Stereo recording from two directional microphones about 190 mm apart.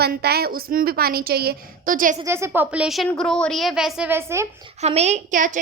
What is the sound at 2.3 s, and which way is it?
A woman's voice, 10° right (ahead or behind).